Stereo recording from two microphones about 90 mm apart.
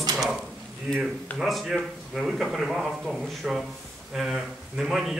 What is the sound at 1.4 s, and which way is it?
A man's voice, centre (ahead or behind).